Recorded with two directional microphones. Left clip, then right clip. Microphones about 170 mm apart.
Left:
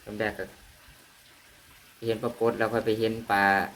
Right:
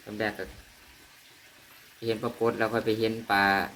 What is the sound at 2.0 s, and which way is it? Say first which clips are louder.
Speech: left 1 dB; 5° right (ahead or behind).